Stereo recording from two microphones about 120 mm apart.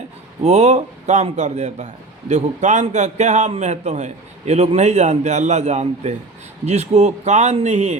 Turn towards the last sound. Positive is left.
turn(degrees=-70)  # may be behind; listen again after turning